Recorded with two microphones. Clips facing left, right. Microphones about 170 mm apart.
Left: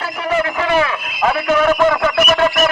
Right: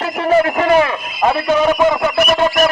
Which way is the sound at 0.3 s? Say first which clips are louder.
Right 5 dB; 35° right (ahead or behind).